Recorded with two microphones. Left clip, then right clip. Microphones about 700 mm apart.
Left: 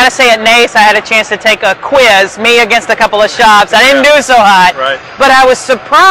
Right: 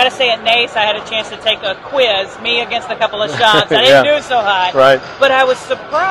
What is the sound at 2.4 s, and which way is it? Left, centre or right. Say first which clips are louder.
Speech: left 10 dB; left.